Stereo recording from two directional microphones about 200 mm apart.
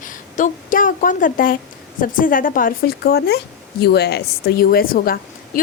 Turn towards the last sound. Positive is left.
turn(degrees=45)  # may be behind; listen again after turning